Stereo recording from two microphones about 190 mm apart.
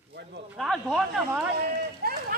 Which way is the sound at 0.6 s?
Centre (ahead or behind).